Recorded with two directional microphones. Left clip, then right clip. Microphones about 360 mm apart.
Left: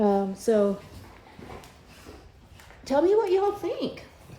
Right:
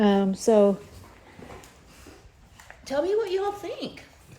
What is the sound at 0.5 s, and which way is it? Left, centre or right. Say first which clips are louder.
Speech: right 3 dB; centre.